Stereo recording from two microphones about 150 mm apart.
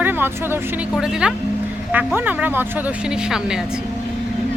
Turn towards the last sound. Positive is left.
turn(degrees=-5)  # may be behind; listen again after turning